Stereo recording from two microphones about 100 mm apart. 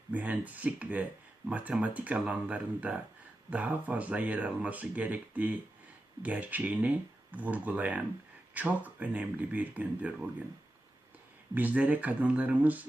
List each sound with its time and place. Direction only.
0.1 s speech: 15° right (ahead or behind)
11.5 s speech: 15° right (ahead or behind)